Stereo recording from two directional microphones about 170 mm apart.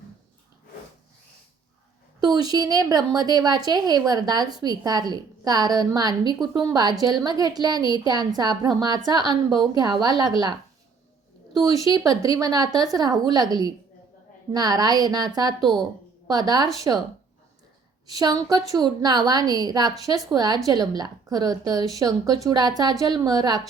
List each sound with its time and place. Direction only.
2.2 s a woman's voice: 25° right (ahead or behind)
11.6 s a woman's voice: 20° right (ahead or behind)
18.0 s a woman's voice: 20° right (ahead or behind)